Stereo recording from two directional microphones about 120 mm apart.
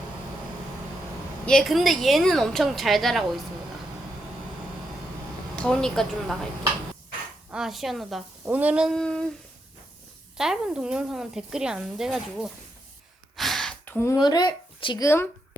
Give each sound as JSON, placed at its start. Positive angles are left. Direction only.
{"t": 1.5, "sound": "speech", "side_deg": 0}
{"t": 5.5, "sound": "speech", "side_deg": 5}
{"t": 7.5, "sound": "speech", "side_deg": -5}
{"t": 8.4, "sound": "speech", "side_deg": -10}
{"t": 9.0, "sound": "humming", "side_deg": 5}
{"t": 10.3, "sound": "speech", "side_deg": -5}
{"t": 13.3, "sound": "gasp", "side_deg": 0}
{"t": 13.8, "sound": "a sound", "side_deg": 15}
{"t": 14.2, "sound": "speech", "side_deg": 35}
{"t": 15.0, "sound": "speech", "side_deg": 20}